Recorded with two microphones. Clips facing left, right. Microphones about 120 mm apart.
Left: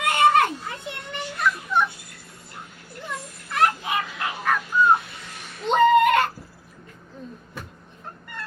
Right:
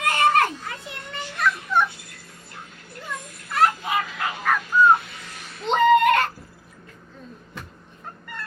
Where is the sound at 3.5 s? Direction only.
Centre (ahead or behind).